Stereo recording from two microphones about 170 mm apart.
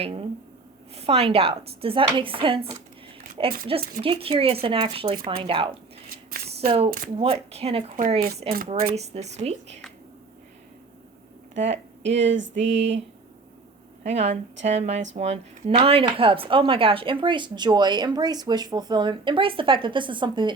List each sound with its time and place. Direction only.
0.0 s speech: 35° right (ahead or behind)
6.3 s speech: 60° right (ahead or behind)
6.7 s speech: 35° right (ahead or behind)
11.5 s speech: 40° right (ahead or behind)
12.1 s a sound: 90° right
14.0 s speech: 40° right (ahead or behind)